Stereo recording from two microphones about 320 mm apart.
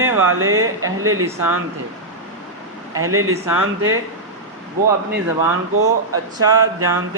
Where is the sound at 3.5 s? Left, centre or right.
Right.